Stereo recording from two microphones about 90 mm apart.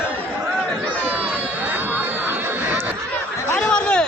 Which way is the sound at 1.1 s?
20° right (ahead or behind).